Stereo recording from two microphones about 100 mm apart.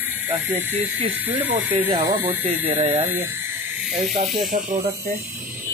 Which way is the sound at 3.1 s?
20° right (ahead or behind).